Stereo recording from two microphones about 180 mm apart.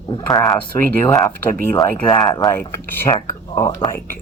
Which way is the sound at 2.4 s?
Centre (ahead or behind).